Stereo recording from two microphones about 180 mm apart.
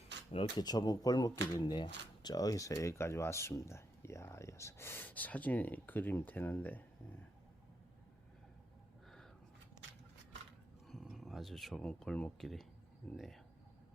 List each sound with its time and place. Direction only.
0.3 s speech: 25° left (ahead or behind); by 6.8 s 10° left (ahead or behind)
10.8 s speech: centre (ahead or behind)